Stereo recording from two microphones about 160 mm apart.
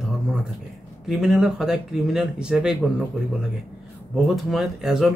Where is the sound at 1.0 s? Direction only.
5° right (ahead or behind).